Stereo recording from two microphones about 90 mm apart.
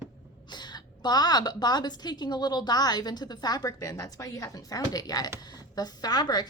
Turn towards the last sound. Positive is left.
turn(degrees=50)  # may be behind; listen again after turning